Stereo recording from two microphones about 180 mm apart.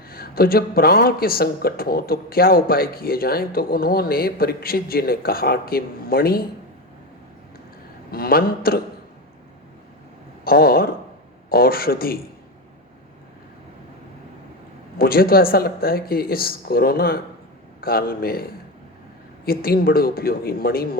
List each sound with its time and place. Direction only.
0.1 s speech: 55° left (ahead or behind)
8.1 s speech: 55° left (ahead or behind)
10.4 s speech: 55° left (ahead or behind)
14.9 s speech: 55° left (ahead or behind)
19.5 s speech: 55° left (ahead or behind)